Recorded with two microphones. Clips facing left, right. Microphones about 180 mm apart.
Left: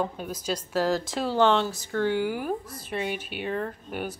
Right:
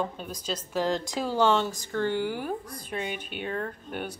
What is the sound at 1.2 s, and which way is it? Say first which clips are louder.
Speech: left 1 dB; 10° right (ahead or behind).